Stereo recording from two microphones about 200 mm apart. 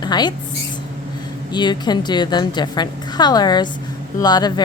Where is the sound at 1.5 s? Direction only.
20° left (ahead or behind).